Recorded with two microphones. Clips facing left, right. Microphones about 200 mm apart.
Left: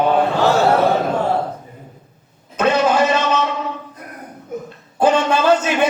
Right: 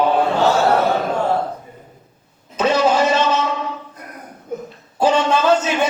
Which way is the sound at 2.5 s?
55° left (ahead or behind).